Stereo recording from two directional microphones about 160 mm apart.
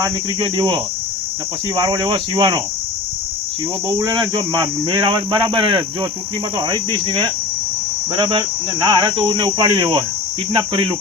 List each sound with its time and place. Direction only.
0.0 s speech: 30° right (ahead or behind)
3.8 s speech: 30° right (ahead or behind)